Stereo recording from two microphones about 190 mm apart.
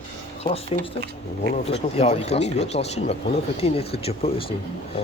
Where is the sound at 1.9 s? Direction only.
30° left (ahead or behind).